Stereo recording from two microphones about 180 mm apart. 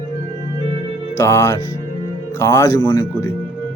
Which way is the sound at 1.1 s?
15° left (ahead or behind).